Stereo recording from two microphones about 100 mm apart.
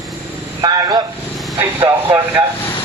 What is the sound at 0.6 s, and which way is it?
Speech, 45° right (ahead or behind).